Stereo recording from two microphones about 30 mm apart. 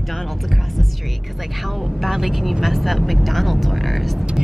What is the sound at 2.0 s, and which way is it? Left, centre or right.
Speech, centre.